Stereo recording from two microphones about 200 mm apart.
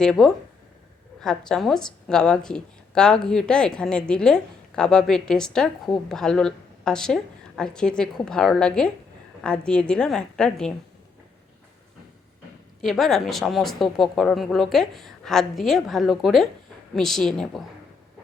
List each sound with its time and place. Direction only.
0.0 s a woman's voice: centre (ahead or behind)
12.8 s a woman's voice: centre (ahead or behind)